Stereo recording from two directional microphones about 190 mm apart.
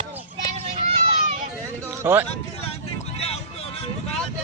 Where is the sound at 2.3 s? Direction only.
30° left (ahead or behind).